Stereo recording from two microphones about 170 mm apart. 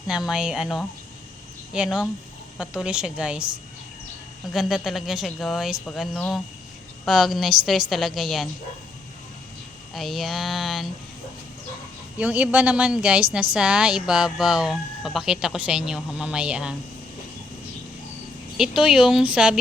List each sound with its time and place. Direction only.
0.1 s a woman's voice: 5° right (ahead or behind)
4.5 s a woman's voice: centre (ahead or behind)
9.9 s a woman's voice: centre (ahead or behind)
12.1 s a woman's voice: 10° right (ahead or behind)
18.5 s a woman's voice: 5° right (ahead or behind)